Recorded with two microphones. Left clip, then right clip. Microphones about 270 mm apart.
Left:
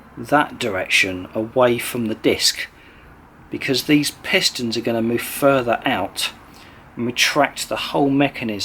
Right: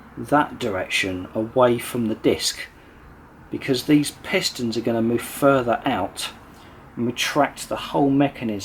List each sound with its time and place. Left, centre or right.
0.3 s speech: centre
7.9 s speech: right
8.3 s speech: centre